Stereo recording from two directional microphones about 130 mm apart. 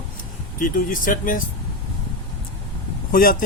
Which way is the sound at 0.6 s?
90° left.